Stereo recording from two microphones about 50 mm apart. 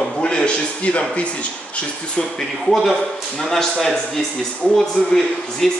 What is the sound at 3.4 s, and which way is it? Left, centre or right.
Speech, centre.